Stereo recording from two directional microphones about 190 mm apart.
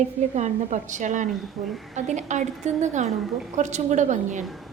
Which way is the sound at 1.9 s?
35° right (ahead or behind).